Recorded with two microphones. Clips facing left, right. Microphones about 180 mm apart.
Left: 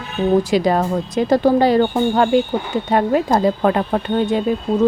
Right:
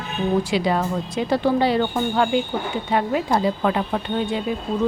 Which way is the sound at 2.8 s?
45° left (ahead or behind).